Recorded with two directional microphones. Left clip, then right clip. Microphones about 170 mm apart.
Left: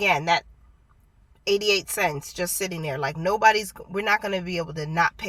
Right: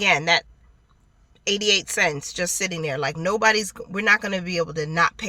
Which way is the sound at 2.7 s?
15° right (ahead or behind).